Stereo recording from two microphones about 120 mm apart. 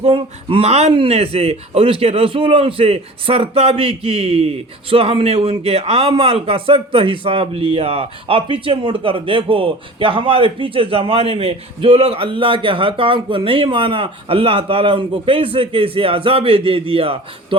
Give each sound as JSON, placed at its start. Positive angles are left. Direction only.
{"t": 0.0, "sound": "speech", "side_deg": -50}